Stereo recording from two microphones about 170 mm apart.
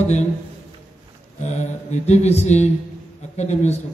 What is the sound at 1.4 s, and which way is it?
A man's voice, 40° left (ahead or behind).